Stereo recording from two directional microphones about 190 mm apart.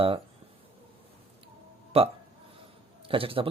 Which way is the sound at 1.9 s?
30° right (ahead or behind).